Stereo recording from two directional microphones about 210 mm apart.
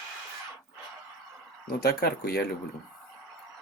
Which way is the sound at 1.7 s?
45° left (ahead or behind).